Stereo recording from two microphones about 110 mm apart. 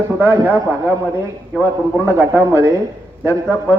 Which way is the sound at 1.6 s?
25° right (ahead or behind).